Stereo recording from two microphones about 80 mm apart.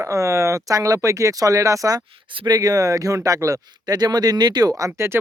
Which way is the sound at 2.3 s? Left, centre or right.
Right.